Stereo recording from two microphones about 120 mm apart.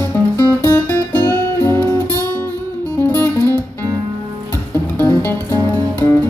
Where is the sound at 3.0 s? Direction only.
15° left (ahead or behind).